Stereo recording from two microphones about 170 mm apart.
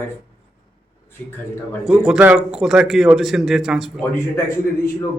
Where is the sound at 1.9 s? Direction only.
5° right (ahead or behind).